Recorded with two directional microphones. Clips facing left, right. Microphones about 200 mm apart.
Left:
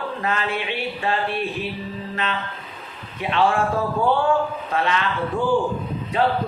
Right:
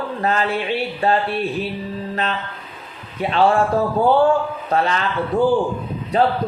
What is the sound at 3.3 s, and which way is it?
Speech, 35° right (ahead or behind).